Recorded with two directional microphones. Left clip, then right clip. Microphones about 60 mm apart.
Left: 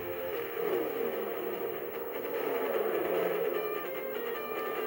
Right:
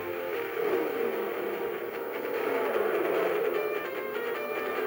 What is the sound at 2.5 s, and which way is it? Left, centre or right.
Music, right.